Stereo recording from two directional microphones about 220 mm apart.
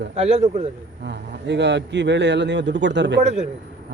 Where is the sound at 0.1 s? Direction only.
30° right (ahead or behind).